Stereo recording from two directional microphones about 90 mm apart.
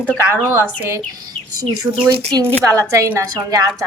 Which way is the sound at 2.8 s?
35° right (ahead or behind).